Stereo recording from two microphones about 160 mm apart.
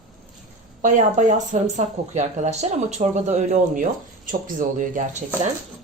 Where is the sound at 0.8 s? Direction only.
50° right (ahead or behind).